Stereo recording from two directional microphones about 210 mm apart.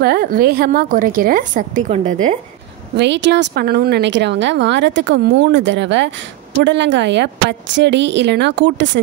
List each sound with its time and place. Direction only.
0.0 s a woman's voice: 45° right (ahead or behind)
3.0 s a woman's voice: 55° right (ahead or behind)